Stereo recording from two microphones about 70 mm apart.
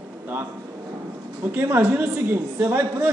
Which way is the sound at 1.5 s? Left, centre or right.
Right.